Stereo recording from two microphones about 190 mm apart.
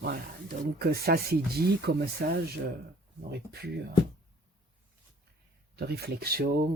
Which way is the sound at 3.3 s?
60° right (ahead or behind).